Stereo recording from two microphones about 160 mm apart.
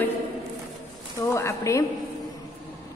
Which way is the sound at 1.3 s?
20° left (ahead or behind).